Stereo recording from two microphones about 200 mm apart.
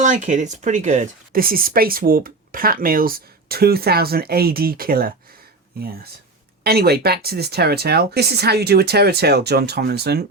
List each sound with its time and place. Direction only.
0.0 s speech: 40° right (ahead or behind)
6.6 s speech: 50° right (ahead or behind)